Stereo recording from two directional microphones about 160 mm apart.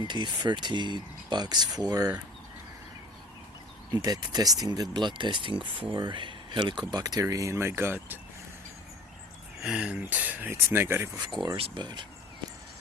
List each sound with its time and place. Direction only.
0.0 s speech: 30° right (ahead or behind)
3.9 s speech: 25° right (ahead or behind)
9.6 s speech: 5° right (ahead or behind)
11.4 s speech: 35° right (ahead or behind)